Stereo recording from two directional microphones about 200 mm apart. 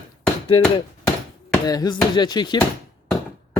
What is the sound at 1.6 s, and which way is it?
Speech, 20° left (ahead or behind).